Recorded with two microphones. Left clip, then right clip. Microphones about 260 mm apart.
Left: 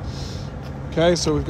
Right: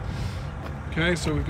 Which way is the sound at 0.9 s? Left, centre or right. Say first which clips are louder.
Left 8 dB; centre.